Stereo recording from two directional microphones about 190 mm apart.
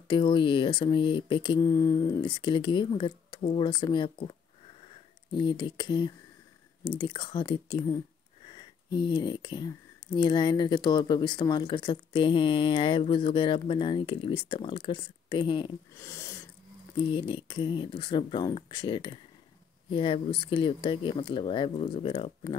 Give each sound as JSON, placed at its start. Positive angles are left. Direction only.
{"t": 0.1, "sound": "speech", "side_deg": 25}
{"t": 16.0, "sound": "speech", "side_deg": 15}
{"t": 16.9, "sound": "speech", "side_deg": 25}